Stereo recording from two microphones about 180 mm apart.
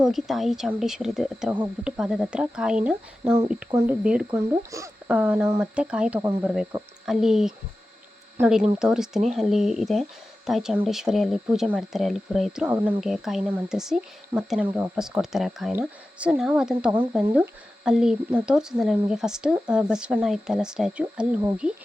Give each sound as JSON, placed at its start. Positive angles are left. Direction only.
{"t": 0.0, "sound": "speech", "side_deg": 0}
{"t": 4.0, "sound": "speech", "side_deg": -5}
{"t": 4.4, "sound": "speech", "side_deg": -15}
{"t": 6.1, "sound": "speech", "side_deg": -15}
{"t": 7.0, "sound": "speech", "side_deg": 0}